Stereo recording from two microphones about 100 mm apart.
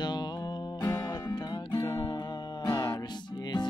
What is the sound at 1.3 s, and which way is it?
Music, 45° left (ahead or behind).